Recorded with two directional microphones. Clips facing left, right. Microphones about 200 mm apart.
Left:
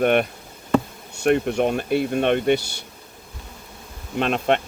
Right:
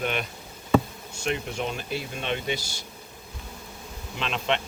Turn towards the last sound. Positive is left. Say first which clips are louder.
# left 7 dB
turn(degrees=50)  # may be behind; listen again after turning